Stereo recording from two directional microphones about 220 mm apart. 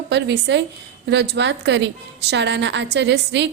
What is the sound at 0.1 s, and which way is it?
A woman's voice, 50° right (ahead or behind).